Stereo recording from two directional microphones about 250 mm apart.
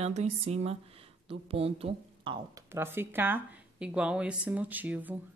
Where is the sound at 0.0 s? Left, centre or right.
Right.